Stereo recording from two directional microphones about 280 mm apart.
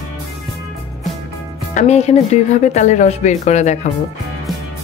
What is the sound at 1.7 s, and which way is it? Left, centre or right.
Speech, left.